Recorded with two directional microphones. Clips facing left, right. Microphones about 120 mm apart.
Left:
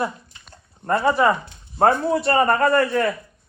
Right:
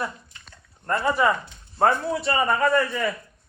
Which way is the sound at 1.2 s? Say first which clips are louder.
Left 3 dB; 20° left (ahead or behind).